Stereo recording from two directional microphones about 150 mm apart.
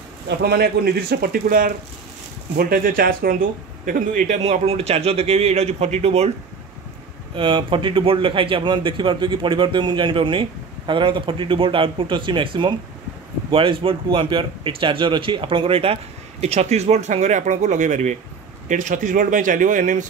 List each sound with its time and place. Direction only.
0.4 s a man's voice: 90° right
3.8 s speech: 65° right (ahead or behind)
4.4 s a man's voice: 40° right (ahead or behind)
7.3 s speech: 35° right (ahead or behind); by 20.1 s 55° right (ahead or behind)